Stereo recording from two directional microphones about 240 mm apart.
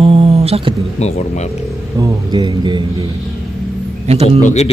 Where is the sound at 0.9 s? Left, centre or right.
Left.